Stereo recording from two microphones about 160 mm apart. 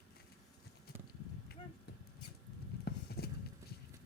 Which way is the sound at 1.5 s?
80° left.